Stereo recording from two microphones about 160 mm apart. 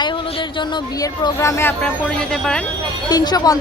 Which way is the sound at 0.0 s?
30° left (ahead or behind).